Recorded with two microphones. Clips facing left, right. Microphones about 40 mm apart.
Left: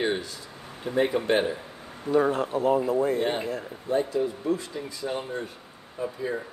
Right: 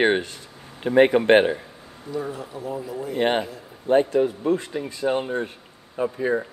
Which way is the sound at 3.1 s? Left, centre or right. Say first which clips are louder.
Right 4 dB; right.